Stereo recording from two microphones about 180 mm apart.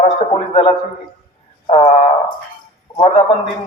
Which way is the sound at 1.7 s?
30° left (ahead or behind).